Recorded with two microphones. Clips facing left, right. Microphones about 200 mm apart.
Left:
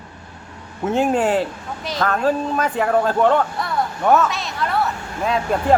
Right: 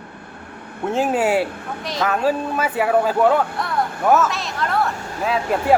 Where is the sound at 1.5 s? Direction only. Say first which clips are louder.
Right 1 dB; 60° right (ahead or behind).